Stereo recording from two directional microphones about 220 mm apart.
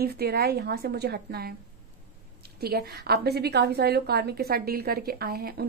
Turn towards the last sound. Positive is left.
turn(degrees=-45)  # may be behind; listen again after turning